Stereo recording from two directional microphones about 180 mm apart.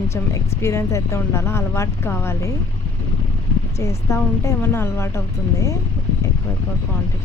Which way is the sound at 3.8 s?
15° left (ahead or behind).